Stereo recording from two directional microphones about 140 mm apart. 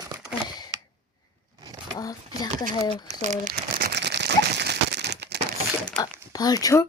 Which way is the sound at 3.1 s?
55° right (ahead or behind).